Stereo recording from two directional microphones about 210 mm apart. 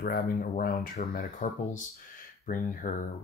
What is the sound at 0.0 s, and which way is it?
Speech, 45° left (ahead or behind).